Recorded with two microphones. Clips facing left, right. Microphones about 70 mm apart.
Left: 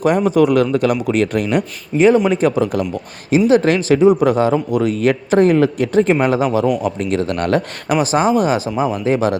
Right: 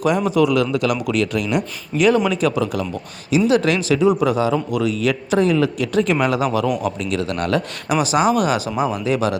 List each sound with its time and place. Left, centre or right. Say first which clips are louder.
0.3 s a man's voice: left 4 dB; left
1.9 s a man's voice: left 5 dB; centre
2.3 s a man's voice: left 4 dB; left